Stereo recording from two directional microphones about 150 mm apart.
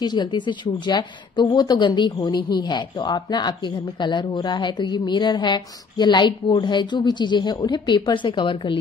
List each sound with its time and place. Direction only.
0.0 s speech: 30° left (ahead or behind)